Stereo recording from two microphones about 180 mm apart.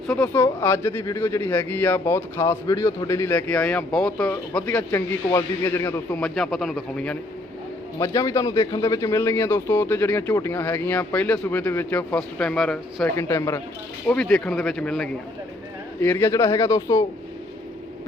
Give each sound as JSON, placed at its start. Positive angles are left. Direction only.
{"t": 0.1, "sound": "speech", "side_deg": 10}
{"t": 7.9, "sound": "speech", "side_deg": 15}
{"t": 14.1, "sound": "speech", "side_deg": 5}